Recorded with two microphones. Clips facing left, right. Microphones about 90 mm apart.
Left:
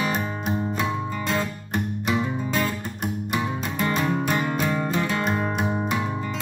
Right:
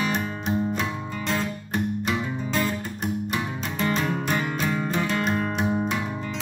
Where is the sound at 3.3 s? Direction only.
5° left (ahead or behind).